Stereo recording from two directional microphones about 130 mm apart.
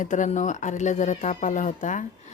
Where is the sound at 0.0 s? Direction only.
75° left (ahead or behind).